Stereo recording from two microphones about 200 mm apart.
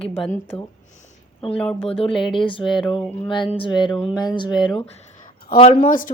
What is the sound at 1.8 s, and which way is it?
Speech, 30° left (ahead or behind).